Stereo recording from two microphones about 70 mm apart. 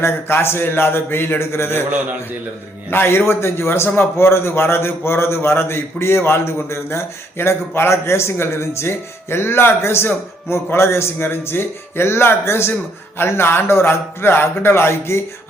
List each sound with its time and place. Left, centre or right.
0.0 s a man's voice: left
2.9 s a man's voice: left